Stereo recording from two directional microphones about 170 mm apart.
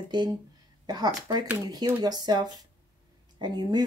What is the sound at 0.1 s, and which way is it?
Speech, 25° right (ahead or behind).